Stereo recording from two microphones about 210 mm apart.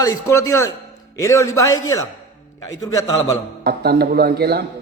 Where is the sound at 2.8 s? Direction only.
15° left (ahead or behind).